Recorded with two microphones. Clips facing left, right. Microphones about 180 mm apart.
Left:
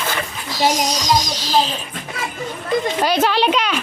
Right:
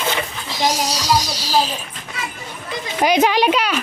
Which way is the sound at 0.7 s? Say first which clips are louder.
Left 1 dB; 10° right (ahead or behind).